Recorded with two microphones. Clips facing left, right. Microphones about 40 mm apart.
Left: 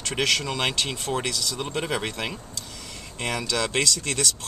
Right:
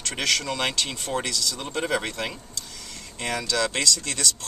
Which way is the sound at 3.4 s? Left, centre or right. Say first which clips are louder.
Right 1 dB; left.